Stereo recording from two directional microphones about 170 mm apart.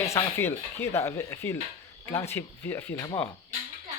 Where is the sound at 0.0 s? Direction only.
15° left (ahead or behind).